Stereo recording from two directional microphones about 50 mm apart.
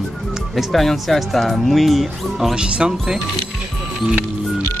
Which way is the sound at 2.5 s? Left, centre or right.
Centre.